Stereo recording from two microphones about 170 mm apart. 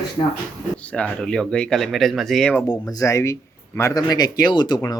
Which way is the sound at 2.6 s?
20° left (ahead or behind).